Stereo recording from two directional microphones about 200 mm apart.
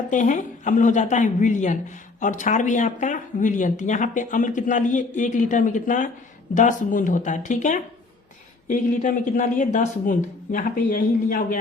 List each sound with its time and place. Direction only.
0.1 s speech: 40° left (ahead or behind)